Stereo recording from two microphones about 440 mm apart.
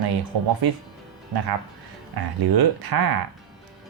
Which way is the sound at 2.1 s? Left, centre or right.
Right.